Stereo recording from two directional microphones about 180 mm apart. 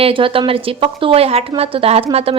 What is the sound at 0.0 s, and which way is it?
A woman's voice, 30° right (ahead or behind).